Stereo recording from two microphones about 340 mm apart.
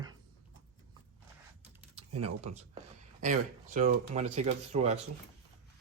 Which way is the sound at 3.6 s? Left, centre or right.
Right.